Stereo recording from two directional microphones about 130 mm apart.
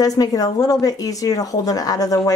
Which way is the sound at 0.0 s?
30° left (ahead or behind).